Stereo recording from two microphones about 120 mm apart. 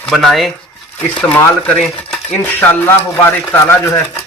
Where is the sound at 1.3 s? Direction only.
10° left (ahead or behind).